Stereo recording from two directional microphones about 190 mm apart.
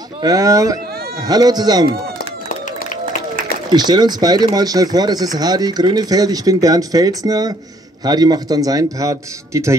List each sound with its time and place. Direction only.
0.2 s speech: 20° right (ahead or behind)
3.7 s speech: 20° right (ahead or behind)